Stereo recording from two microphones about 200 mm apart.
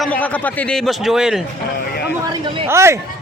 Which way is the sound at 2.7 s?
15° right (ahead or behind).